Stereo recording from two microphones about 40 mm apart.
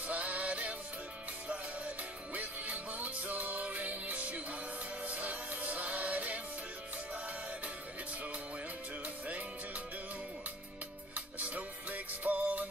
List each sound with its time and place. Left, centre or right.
0.0 s music: right
2.3 s music: right
11.1 s music: right